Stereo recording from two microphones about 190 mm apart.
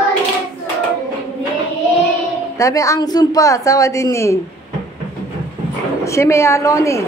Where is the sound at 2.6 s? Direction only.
15° left (ahead or behind).